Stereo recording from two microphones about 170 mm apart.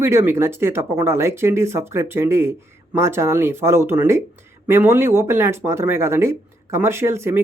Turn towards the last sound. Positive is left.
turn(degrees=-15)  # may be behind; listen again after turning